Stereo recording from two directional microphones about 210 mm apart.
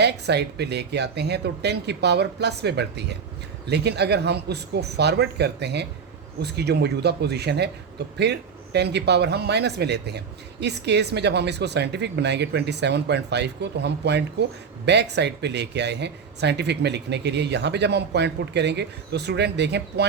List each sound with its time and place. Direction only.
0.0 s speech: 55° right (ahead or behind)